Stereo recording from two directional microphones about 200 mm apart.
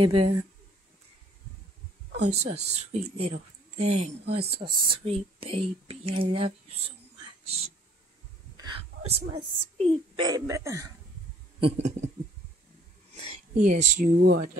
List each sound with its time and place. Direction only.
0.0 s speech: 30° right (ahead or behind)
2.3 s speech: 30° right (ahead or behind)
8.5 s whispering: 25° right (ahead or behind)
9.3 s a woman's voice: 30° right (ahead or behind)
11.6 s speech: 35° right (ahead or behind)
13.1 s speech: 35° right (ahead or behind)